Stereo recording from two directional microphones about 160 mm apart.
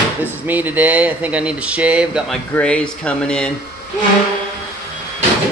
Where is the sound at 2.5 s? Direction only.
5° left (ahead or behind).